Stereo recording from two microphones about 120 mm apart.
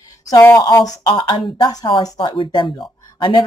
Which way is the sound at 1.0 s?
40° left (ahead or behind).